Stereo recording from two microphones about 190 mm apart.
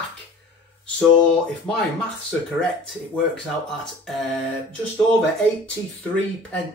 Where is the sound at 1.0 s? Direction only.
5° left (ahead or behind).